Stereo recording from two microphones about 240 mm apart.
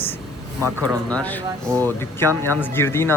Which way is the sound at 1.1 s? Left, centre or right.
Centre.